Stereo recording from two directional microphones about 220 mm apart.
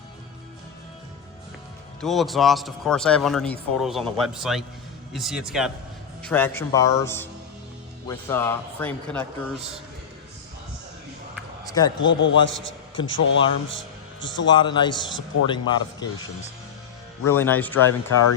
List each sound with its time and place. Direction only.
2.0 s speech: centre (ahead or behind)
6.2 s a man's voice: 10° left (ahead or behind)
11.6 s a sound: 15° left (ahead or behind)
12.0 s a man's voice: 55° left (ahead or behind)
14.4 s a man's voice: 20° left (ahead or behind)
17.2 s a man's voice: 10° left (ahead or behind)